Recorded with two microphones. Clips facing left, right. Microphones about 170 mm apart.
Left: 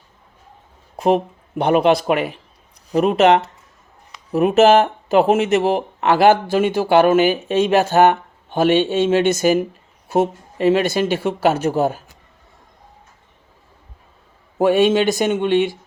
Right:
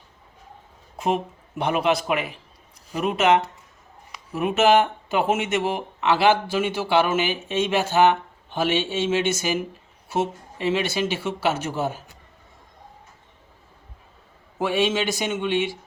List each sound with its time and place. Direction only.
0.9 s speech: 35° left (ahead or behind)
14.6 s speech: 50° left (ahead or behind)